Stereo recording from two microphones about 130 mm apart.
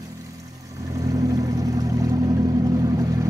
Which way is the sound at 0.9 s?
25° right (ahead or behind).